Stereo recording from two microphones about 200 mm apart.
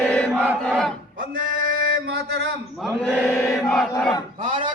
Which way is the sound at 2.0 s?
70° right (ahead or behind).